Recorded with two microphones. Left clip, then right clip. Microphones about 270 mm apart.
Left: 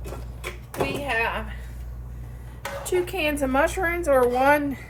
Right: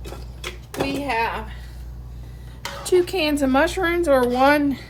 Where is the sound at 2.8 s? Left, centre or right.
Right.